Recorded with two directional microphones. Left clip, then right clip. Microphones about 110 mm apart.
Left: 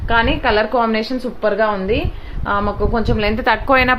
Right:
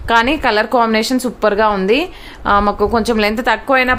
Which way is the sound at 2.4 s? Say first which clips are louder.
Right 6 dB; 90° right.